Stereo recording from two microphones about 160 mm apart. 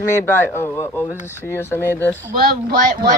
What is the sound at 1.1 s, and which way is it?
Speech, 10° right (ahead or behind).